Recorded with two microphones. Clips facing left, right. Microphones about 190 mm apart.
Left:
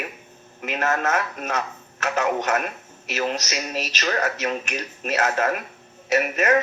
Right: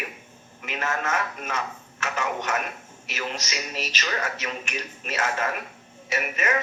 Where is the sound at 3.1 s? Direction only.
40° left (ahead or behind).